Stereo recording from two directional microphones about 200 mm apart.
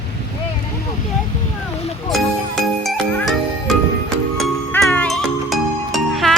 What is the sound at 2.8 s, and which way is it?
Jingle, centre (ahead or behind).